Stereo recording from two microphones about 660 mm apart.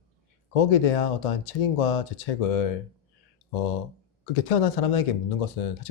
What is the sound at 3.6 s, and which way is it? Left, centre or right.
Speech, left.